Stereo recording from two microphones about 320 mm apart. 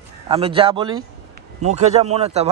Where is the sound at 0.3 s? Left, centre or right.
Centre.